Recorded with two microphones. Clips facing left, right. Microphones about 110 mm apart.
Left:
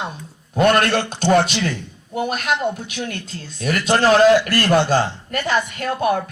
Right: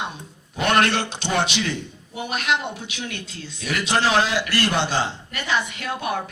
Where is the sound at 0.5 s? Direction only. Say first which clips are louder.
Left 4 dB; 45° left (ahead or behind).